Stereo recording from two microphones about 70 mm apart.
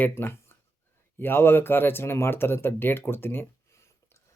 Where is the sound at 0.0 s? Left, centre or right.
Left.